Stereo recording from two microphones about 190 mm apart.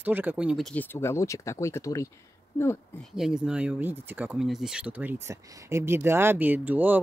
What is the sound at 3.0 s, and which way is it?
Speech, 5° right (ahead or behind).